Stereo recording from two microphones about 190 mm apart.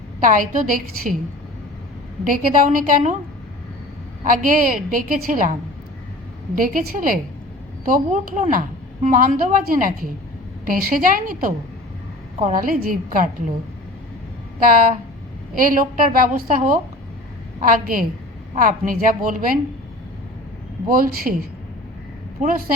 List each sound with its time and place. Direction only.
0.2 s a woman's voice: 45° right (ahead or behind)
2.2 s a woman's voice: 40° right (ahead or behind)
4.2 s a woman's voice: 45° right (ahead or behind)
6.6 s a woman's voice: 45° right (ahead or behind)
14.6 s a woman's voice: 45° right (ahead or behind)
20.9 s a woman's voice: 50° right (ahead or behind)
22.4 s a woman's voice: 40° right (ahead or behind)